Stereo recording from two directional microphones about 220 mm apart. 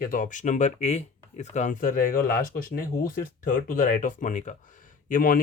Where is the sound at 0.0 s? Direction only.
40° left (ahead or behind).